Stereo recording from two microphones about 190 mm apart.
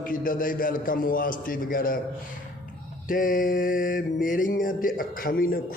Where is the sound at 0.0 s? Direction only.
45° left (ahead or behind).